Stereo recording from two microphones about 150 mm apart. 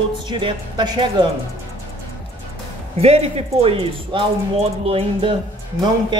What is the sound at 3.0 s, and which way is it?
Speech, 45° right (ahead or behind).